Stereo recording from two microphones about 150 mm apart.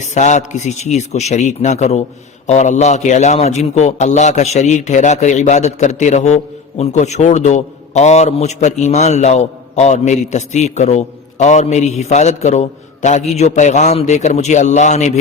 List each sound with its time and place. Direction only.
0.0 s a man's voice: 50° left (ahead or behind)